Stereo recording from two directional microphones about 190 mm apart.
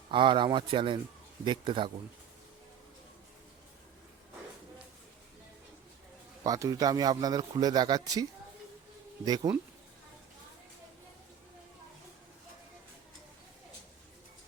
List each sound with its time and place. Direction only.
0.1 s a man's voice: 25° right (ahead or behind)
6.4 s a man's voice: 20° right (ahead or behind)